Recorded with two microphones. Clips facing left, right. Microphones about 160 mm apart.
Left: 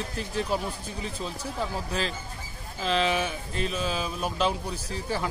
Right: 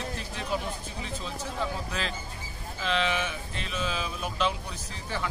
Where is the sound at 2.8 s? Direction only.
35° left (ahead or behind).